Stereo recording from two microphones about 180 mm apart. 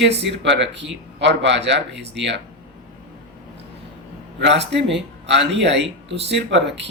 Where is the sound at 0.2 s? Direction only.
75° right (ahead or behind).